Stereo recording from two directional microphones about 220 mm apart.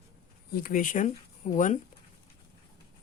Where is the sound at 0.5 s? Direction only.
40° left (ahead or behind).